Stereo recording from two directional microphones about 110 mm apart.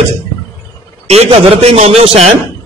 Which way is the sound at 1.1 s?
70° right (ahead or behind).